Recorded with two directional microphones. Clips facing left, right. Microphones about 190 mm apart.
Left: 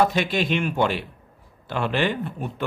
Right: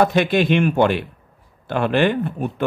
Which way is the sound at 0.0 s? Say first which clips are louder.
Right 5 dB; 55° right (ahead or behind).